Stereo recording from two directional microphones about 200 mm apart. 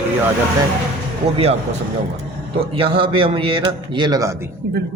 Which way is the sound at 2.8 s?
25° right (ahead or behind).